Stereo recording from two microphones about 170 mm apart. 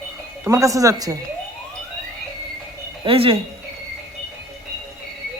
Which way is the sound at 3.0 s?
35° right (ahead or behind).